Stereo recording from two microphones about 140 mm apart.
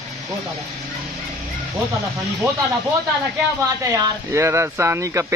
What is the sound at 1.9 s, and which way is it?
Speech, 20° right (ahead or behind).